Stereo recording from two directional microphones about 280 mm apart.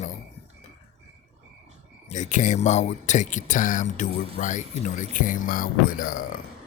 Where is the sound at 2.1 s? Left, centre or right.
Left.